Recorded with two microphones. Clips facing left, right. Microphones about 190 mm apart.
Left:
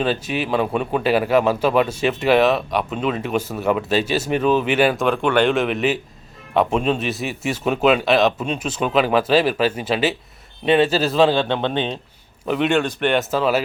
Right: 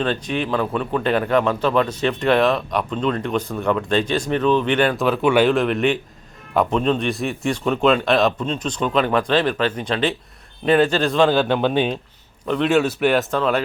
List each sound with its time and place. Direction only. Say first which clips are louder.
0.0 s a man's voice: left 1 dB; 5° left (ahead or behind)
5.0 s speech: right 1 dB; 5° right (ahead or behind)